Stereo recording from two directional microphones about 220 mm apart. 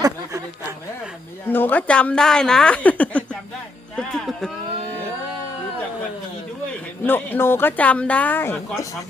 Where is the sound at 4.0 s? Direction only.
5° left (ahead or behind).